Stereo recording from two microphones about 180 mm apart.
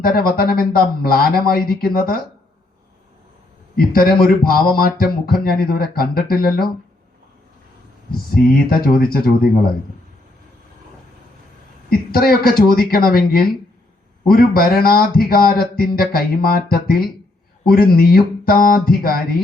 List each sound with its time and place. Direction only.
0.0 s speech: 55° left (ahead or behind)
3.8 s speech: 55° left (ahead or behind)
8.3 s speech: 55° left (ahead or behind)
11.9 s speech: 55° left (ahead or behind)